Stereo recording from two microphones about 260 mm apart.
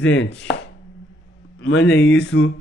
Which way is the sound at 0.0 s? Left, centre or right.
Left.